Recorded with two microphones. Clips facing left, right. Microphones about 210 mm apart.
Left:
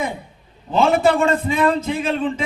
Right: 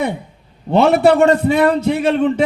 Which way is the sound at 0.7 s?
70° right (ahead or behind).